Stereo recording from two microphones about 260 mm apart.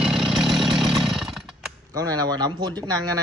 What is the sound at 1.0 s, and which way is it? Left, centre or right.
Chainsaw, centre.